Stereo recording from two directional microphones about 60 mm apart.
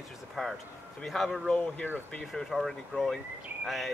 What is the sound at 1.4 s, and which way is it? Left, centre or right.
Speech, centre.